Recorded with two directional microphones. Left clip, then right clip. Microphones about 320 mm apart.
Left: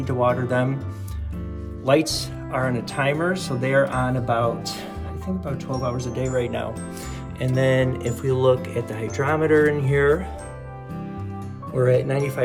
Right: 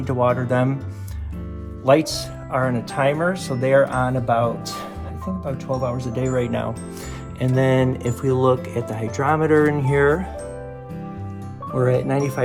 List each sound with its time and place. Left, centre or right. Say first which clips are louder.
0.0 s music: right 2 dB; right
0.4 s speech: right 2 dB; right
1.8 s speech: right 3 dB; centre
11.8 s speech: even; centre